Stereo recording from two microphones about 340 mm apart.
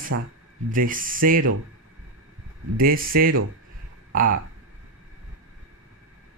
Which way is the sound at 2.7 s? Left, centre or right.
Right.